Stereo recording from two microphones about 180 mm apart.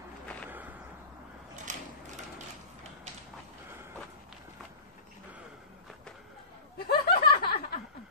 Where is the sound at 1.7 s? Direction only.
45° right (ahead or behind).